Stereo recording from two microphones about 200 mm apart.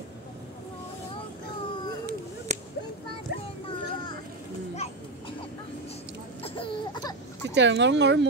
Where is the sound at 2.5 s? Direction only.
35° right (ahead or behind).